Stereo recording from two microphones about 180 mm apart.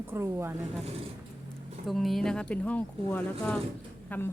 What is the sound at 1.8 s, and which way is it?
Speech, centre (ahead or behind).